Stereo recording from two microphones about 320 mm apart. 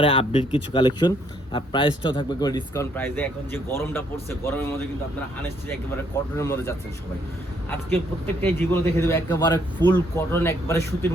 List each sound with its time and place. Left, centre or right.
0.0 s a man's voice: centre
6.3 s a man's voice: centre